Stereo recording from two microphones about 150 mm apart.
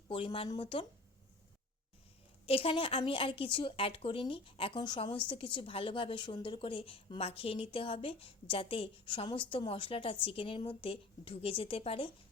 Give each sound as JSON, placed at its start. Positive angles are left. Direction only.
{"t": 0.1, "sound": "a woman's voice", "side_deg": 35}
{"t": 2.5, "sound": "a woman's voice", "side_deg": 40}